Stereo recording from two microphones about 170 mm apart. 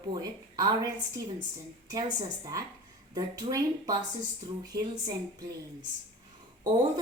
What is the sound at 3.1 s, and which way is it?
Speech, 20° right (ahead or behind).